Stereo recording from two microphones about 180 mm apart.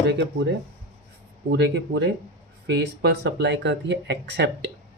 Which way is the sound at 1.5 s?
70° right (ahead or behind).